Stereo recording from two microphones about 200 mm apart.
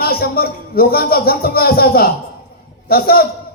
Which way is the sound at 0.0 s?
50° left (ahead or behind).